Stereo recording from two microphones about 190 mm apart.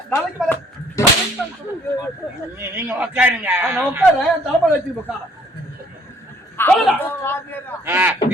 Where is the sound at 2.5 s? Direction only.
10° right (ahead or behind).